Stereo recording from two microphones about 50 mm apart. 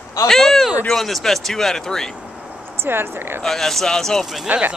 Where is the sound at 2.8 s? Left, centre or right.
Right.